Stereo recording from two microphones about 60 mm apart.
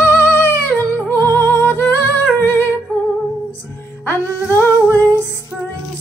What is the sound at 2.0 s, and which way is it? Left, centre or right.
Humming, left.